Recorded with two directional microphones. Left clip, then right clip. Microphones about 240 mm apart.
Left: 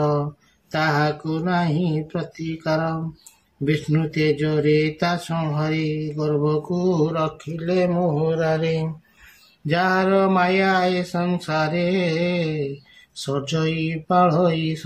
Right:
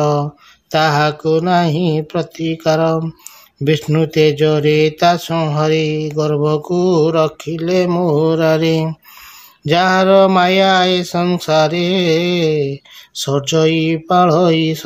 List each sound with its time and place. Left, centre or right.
0.7 s speech: right